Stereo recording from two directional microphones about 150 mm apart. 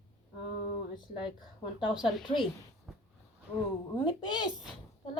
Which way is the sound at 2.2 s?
35° left (ahead or behind).